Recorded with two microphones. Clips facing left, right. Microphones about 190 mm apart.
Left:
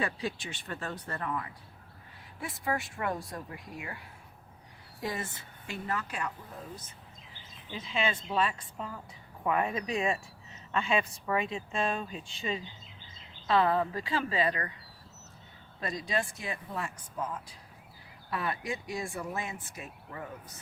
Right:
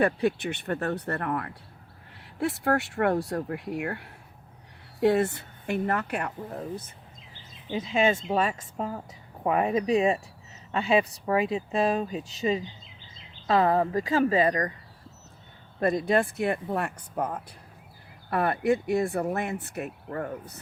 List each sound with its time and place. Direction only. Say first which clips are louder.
0.0 s speech: right 10 dB; 60° right (ahead or behind)
7.7 s speech: right 8 dB; 45° right (ahead or behind)
15.8 s speech: right 10 dB; 55° right (ahead or behind)